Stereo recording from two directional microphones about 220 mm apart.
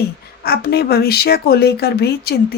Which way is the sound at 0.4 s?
45° left (ahead or behind).